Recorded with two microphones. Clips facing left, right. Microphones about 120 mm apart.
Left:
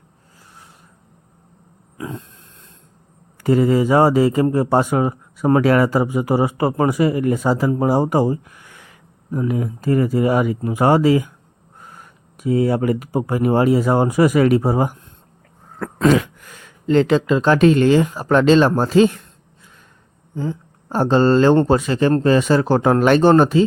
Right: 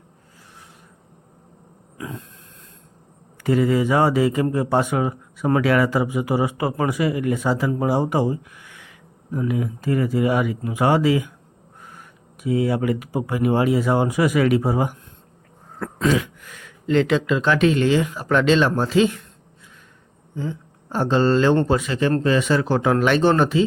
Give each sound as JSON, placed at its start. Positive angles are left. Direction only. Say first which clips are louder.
{"t": 2.0, "sound": "a sound", "louder": "left 3 dB", "side_deg": 30}
{"t": 3.3, "sound": "speech", "louder": "left 3 dB", "side_deg": 35}
{"t": 16.0, "sound": "throat clearing", "louder": "left 5 dB", "side_deg": 55}
{"t": 16.5, "sound": "speech", "louder": "left 4 dB", "side_deg": 35}
{"t": 20.3, "sound": "speech", "louder": "left 4 dB", "side_deg": 40}